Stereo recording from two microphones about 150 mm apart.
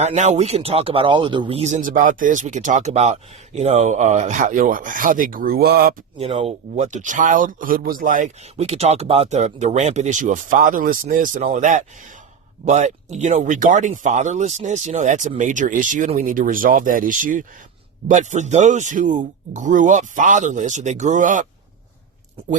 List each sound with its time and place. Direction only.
0.0 s speech: 45° right (ahead or behind); by 6.0 s 90° right
6.1 s speech: 40° right (ahead or behind); by 21.4 s 60° right (ahead or behind)